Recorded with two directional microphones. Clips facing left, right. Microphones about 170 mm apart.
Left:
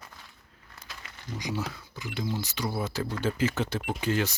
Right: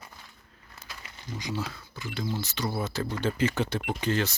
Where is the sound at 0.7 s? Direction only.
Centre (ahead or behind).